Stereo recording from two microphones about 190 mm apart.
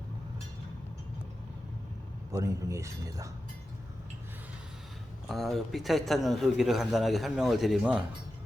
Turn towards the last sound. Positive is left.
turn(degrees=-5)  # may be behind; listen again after turning